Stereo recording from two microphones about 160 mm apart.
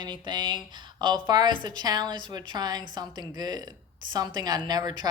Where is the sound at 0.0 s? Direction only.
30° right (ahead or behind).